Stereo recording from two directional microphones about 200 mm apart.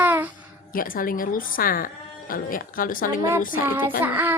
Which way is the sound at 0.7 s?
45° left (ahead or behind).